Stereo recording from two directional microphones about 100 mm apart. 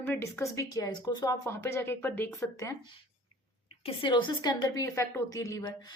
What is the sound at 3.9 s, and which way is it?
Speech, 55° left (ahead or behind).